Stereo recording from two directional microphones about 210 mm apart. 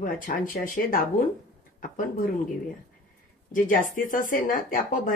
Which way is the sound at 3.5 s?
40° left (ahead or behind).